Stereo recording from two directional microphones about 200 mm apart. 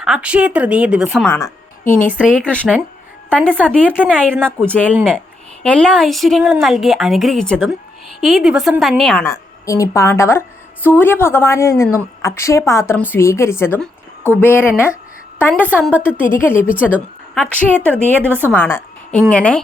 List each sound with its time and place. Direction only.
0.0 s a woman's voice: 5° right (ahead or behind)
1.3 s a woman's voice: 15° left (ahead or behind)